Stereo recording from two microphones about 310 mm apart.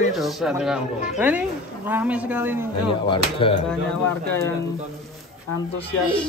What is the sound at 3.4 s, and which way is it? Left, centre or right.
Speech, centre.